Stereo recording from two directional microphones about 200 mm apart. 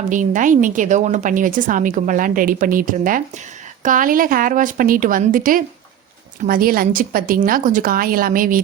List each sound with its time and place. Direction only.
0.1 s a woman's voice: 40° right (ahead or behind)